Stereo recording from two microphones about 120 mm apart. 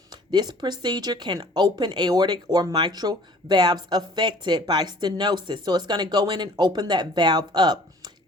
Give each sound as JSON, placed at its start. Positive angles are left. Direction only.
{"t": 0.1, "sound": "speech", "side_deg": -35}